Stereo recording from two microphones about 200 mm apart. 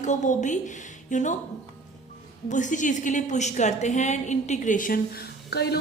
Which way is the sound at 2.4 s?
40° left (ahead or behind).